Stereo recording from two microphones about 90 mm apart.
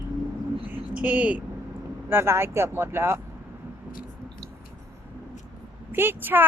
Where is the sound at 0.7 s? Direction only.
15° right (ahead or behind).